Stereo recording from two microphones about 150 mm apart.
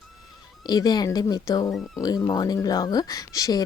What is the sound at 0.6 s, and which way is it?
Speech, 25° left (ahead or behind).